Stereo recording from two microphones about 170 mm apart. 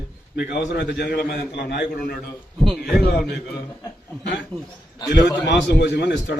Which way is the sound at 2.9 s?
60° left (ahead or behind).